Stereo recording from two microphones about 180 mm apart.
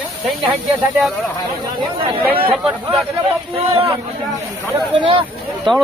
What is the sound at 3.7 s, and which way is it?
Speech, 30° right (ahead or behind).